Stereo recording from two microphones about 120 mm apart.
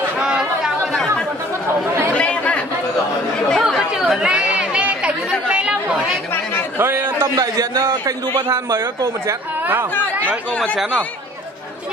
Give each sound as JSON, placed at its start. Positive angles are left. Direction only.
{"t": 0.2, "sound": "chatter", "side_deg": -5}
{"t": 2.1, "sound": "chatter", "side_deg": 10}
{"t": 6.8, "sound": "a sound", "side_deg": -20}
{"t": 7.3, "sound": "a man's voice", "side_deg": -30}